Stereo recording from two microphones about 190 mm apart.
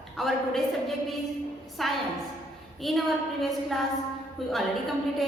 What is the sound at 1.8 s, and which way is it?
A woman's voice, centre (ahead or behind).